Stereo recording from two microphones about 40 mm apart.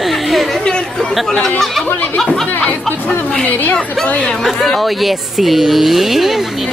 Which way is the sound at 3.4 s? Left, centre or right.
Left.